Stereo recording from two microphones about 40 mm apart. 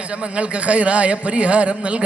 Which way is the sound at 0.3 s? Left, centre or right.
Right.